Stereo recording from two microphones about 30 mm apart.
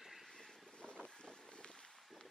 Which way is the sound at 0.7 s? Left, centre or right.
Left.